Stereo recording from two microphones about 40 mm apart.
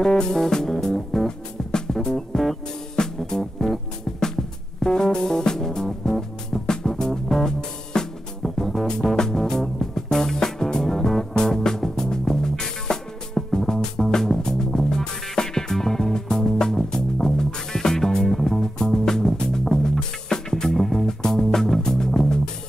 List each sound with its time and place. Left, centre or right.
0.0 s music: centre